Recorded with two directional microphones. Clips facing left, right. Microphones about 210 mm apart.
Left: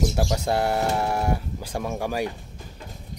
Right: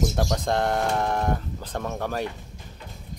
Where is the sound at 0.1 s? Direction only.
5° left (ahead or behind).